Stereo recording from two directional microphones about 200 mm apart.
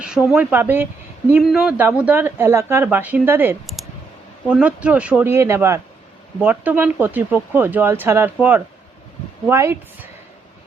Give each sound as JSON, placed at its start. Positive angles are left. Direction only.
{"t": 0.3, "sound": "speech", "side_deg": -10}